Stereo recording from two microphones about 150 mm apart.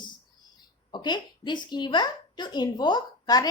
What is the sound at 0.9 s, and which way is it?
A woman's voice, 30° left (ahead or behind).